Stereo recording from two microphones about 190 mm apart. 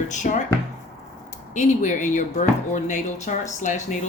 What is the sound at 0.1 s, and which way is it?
Speech, 40° left (ahead or behind).